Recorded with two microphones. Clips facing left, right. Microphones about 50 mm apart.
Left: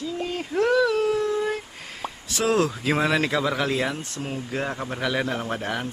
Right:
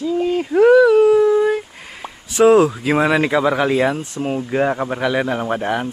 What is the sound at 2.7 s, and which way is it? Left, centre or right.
Speech, centre.